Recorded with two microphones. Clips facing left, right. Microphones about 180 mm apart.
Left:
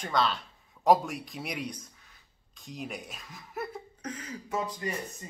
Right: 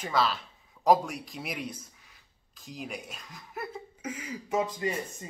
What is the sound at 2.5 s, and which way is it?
Chuckle, centre (ahead or behind).